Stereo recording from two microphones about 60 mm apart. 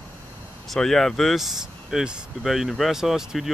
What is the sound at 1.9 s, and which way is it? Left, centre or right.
Speech, centre.